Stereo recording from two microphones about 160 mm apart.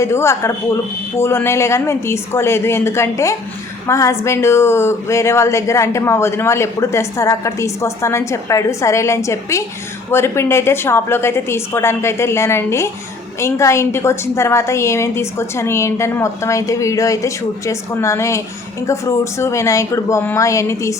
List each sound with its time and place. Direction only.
0.0 s speech: 15° left (ahead or behind)